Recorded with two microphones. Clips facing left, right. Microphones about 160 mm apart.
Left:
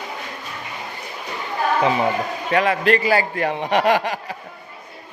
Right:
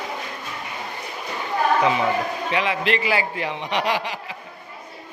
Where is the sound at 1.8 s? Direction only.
35° left (ahead or behind).